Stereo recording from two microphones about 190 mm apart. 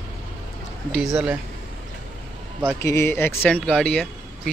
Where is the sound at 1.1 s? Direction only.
10° right (ahead or behind).